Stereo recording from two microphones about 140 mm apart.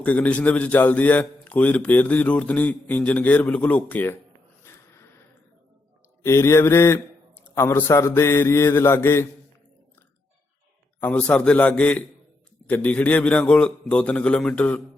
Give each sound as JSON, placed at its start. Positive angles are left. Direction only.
{"t": 0.0, "sound": "speech", "side_deg": 10}
{"t": 4.6, "sound": "a sound", "side_deg": 20}
{"t": 6.2, "sound": "speech", "side_deg": 20}
{"t": 11.0, "sound": "speech", "side_deg": 10}